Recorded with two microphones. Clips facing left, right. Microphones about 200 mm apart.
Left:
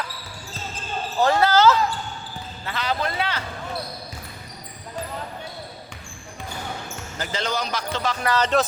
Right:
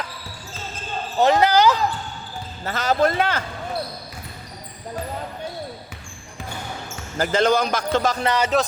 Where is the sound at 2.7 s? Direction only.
45° right (ahead or behind).